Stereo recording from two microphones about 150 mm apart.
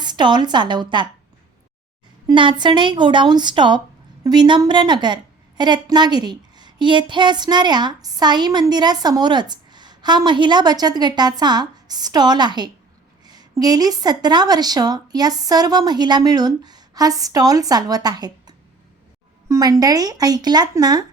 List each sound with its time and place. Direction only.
0.0 s a woman's voice: 30° right (ahead or behind)
2.2 s a woman's voice: 35° right (ahead or behind)
13.2 s a sound: 25° right (ahead or behind)
13.6 s a woman's voice: 25° right (ahead or behind)